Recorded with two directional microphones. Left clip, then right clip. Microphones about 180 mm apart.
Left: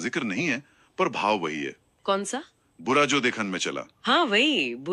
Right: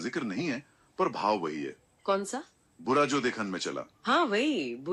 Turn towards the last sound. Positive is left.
turn(degrees=15)  # may be behind; listen again after turning